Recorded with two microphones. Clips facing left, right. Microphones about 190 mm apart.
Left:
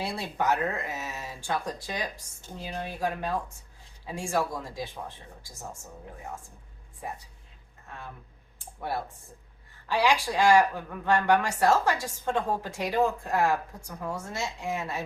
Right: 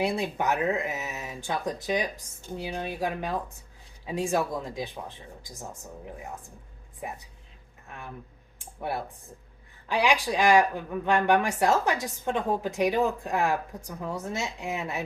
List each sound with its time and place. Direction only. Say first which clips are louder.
0.0 s speech: right 3 dB; 15° right (ahead or behind)
8.5 s a sound: right 1 dB; 15° right (ahead or behind)
9.9 s speech: even; 15° right (ahead or behind)